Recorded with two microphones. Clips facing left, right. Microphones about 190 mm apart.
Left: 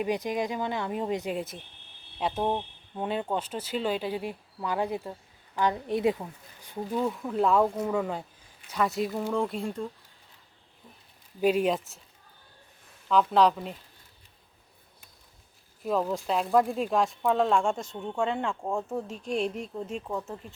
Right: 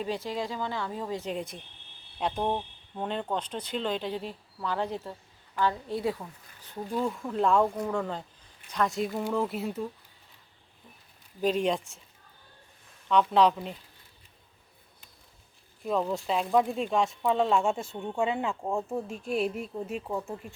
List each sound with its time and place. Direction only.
0.0 s speech: 15° left (ahead or behind)
1.3 s speech: 5° left (ahead or behind)
6.9 s speech: centre (ahead or behind)
11.3 s speech: 10° left (ahead or behind)
13.1 s speech: centre (ahead or behind)
15.8 s speech: centre (ahead or behind)